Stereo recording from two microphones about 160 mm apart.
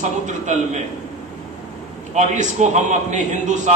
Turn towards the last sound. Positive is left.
turn(degrees=-50)  # may be behind; listen again after turning